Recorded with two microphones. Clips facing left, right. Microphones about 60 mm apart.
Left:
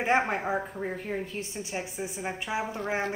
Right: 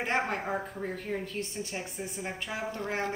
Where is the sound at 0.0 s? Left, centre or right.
Centre.